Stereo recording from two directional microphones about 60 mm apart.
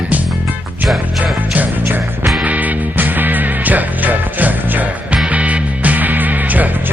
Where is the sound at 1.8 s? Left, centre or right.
Right.